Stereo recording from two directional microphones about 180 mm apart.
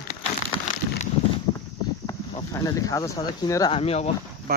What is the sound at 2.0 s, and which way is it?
Speech, 20° left (ahead or behind).